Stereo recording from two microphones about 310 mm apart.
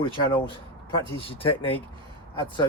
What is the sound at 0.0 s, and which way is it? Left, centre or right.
Speech, centre.